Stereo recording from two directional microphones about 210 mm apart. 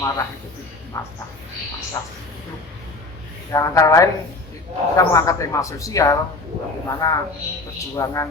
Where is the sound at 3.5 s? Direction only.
15° left (ahead or behind).